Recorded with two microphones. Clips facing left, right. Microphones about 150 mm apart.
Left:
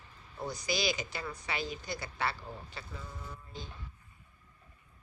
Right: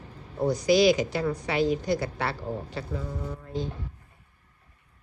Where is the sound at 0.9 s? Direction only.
70° right (ahead or behind).